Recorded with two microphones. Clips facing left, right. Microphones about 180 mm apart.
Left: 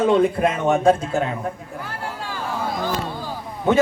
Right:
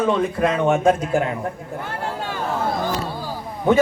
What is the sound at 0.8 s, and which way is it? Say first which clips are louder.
Speech: even; 30° left (ahead or behind).